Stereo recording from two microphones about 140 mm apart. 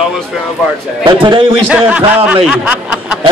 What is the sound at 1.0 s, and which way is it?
Speech, 35° right (ahead or behind).